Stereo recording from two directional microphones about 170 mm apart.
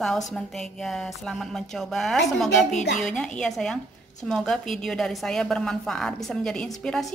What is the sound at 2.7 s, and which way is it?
Speech, 45° left (ahead or behind).